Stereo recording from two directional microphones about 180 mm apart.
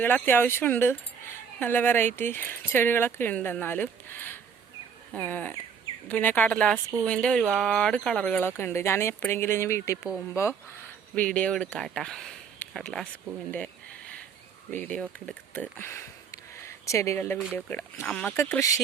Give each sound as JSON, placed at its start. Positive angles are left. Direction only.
{"t": 0.0, "sound": "speech", "side_deg": 10}
{"t": 11.1, "sound": "speech", "side_deg": 5}
{"t": 13.5, "sound": "a sound", "side_deg": 5}
{"t": 14.7, "sound": "speech", "side_deg": 5}
{"t": 15.3, "sound": "a sound", "side_deg": 10}
{"t": 17.5, "sound": "speech", "side_deg": 15}